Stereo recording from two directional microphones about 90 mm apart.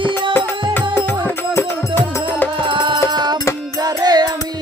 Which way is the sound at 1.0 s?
25° left (ahead or behind).